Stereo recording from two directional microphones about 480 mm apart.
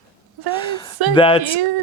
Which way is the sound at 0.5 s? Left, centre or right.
Centre.